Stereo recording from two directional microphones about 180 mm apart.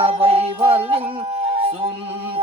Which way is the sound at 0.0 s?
30° right (ahead or behind).